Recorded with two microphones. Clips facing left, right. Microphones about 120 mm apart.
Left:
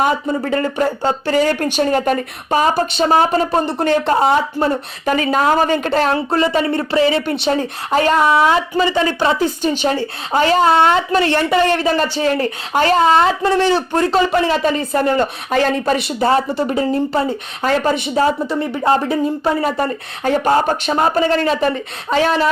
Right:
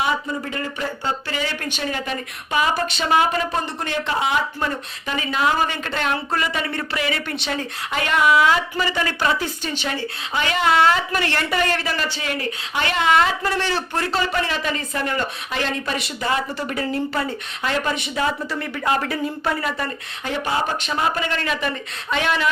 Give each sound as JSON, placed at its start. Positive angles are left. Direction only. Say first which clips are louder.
{"t": 0.4, "sound": "a woman's voice", "louder": "left 10 dB", "side_deg": 45}
{"t": 5.0, "sound": "a woman's voice", "louder": "left 7 dB", "side_deg": 45}
{"t": 9.7, "sound": "a woman's voice", "louder": "left 8 dB", "side_deg": 45}
{"t": 16.2, "sound": "a woman's voice", "louder": "left 8 dB", "side_deg": 30}
{"t": 17.6, "sound": "a woman's voice", "louder": "left 7 dB", "side_deg": 40}
{"t": 19.6, "sound": "speech", "louder": "left 8 dB", "side_deg": 40}